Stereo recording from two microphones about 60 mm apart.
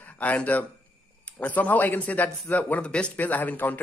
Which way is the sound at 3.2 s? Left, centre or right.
Left.